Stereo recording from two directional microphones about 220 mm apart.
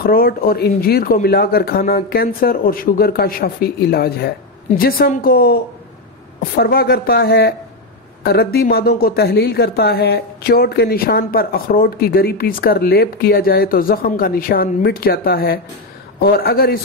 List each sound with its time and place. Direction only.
0.0 s speech: 45° left (ahead or behind)